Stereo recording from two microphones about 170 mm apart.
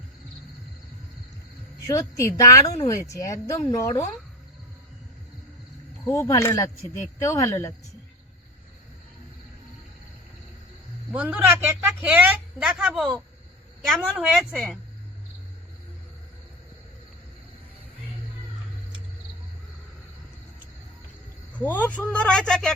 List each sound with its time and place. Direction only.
1.9 s speech: 15° left (ahead or behind)
6.1 s speech: 20° left (ahead or behind)
11.1 s a woman's voice: 10° right (ahead or behind)
21.6 s speech: 10° left (ahead or behind)